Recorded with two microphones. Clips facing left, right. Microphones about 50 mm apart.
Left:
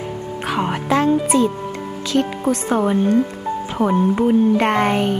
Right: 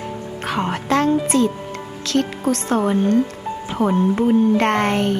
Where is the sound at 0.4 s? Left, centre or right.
Centre.